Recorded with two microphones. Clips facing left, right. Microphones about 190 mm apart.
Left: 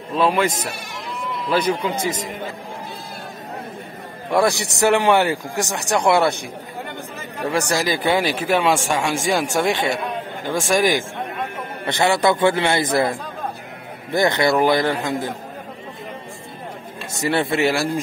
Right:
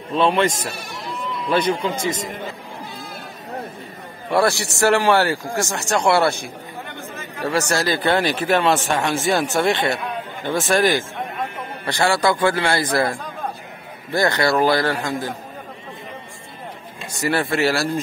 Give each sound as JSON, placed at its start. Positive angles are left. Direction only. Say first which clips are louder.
{"t": 0.2, "sound": "a man's voice", "louder": "right 1 dB", "side_deg": 5}
{"t": 2.0, "sound": "a man's voice", "louder": "even", "side_deg": 60}
{"t": 4.3, "sound": "speech", "louder": "even", "side_deg": 15}
{"t": 7.5, "sound": "a man's voice", "louder": "even", "side_deg": 15}
{"t": 14.1, "sound": "speech", "louder": "left 1 dB", "side_deg": 15}
{"t": 17.1, "sound": "a man's voice", "louder": "left 1 dB", "side_deg": 25}